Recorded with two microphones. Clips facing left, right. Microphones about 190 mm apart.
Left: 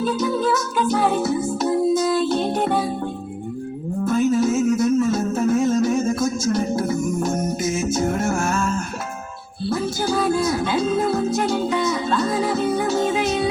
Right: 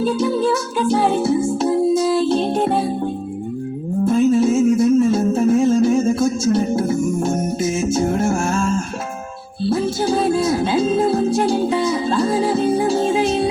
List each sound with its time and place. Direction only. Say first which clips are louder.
0.0 s music: right 3 dB; 30° right (ahead or behind)
4.0 s music: right 4 dB; 25° right (ahead or behind)
7.6 s a sound: right 4 dB; 30° right (ahead or behind)
9.6 s music: right 4 dB; 30° right (ahead or behind)